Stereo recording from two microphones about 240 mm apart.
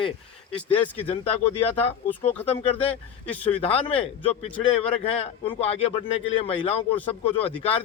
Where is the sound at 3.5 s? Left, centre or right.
Left.